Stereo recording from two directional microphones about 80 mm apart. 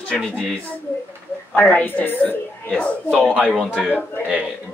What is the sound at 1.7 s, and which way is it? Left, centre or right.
A woman's voice, left.